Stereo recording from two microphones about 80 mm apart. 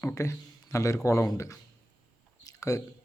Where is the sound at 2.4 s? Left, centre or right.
Left.